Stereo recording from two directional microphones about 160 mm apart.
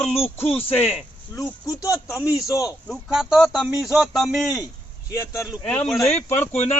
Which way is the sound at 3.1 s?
5° right (ahead or behind).